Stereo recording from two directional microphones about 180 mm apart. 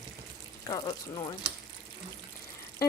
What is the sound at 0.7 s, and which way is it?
Speech, 20° left (ahead or behind).